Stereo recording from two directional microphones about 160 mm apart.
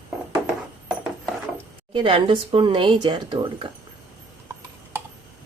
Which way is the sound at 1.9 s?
35° right (ahead or behind).